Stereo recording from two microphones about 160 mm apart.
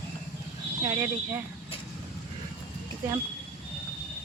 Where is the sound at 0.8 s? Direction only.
15° right (ahead or behind).